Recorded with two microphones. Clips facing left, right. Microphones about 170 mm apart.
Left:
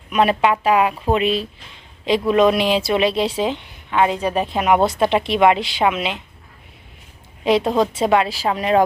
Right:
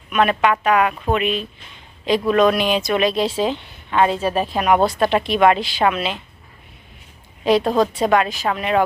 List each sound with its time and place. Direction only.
0.1 s speech: 30° left (ahead or behind)
7.4 s a woman's voice: 20° left (ahead or behind)